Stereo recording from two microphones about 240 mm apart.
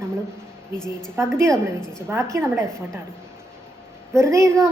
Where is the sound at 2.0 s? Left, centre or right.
Centre.